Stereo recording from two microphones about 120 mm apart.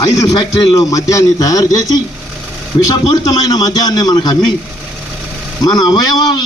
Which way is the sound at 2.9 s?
35° left (ahead or behind).